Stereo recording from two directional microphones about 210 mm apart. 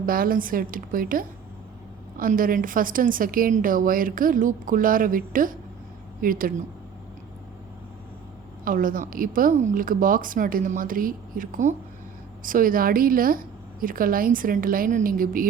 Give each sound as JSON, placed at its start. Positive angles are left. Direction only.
{"t": 0.0, "sound": "a woman's voice", "side_deg": -45}
{"t": 8.6, "sound": "a woman's voice", "side_deg": -40}